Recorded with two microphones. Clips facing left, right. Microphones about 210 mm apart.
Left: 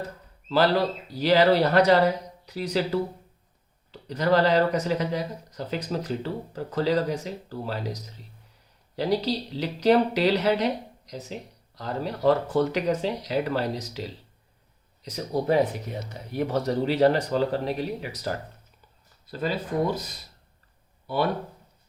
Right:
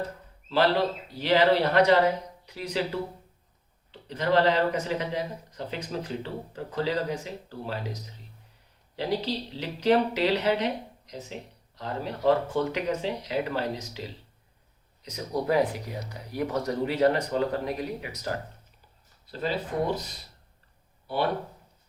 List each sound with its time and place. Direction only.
1.1 s speech: 40° left (ahead or behind)
3.9 s speech: 40° left (ahead or behind)
15.1 s speech: 30° left (ahead or behind)
19.4 s speech: 45° left (ahead or behind)